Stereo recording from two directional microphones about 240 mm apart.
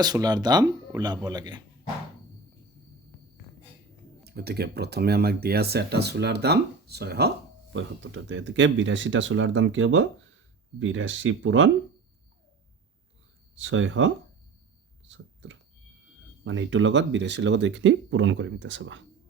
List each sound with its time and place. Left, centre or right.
0.0 s speech: centre
4.2 s speech: right
13.6 s speech: right
15.0 s a sound: right
16.4 s speech: right